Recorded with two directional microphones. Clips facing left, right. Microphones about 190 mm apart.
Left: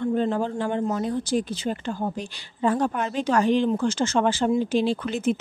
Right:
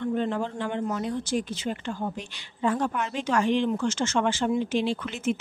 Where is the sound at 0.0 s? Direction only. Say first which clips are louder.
Left 3 dB; 35° left (ahead or behind).